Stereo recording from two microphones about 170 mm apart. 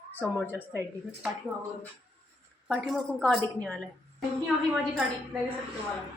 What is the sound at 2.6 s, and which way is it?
A woman's voice, centre (ahead or behind).